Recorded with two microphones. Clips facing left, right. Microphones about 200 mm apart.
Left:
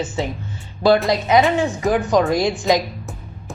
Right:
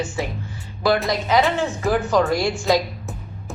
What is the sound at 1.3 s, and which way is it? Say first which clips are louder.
A woman's voice: left 3 dB; 15° left (ahead or behind).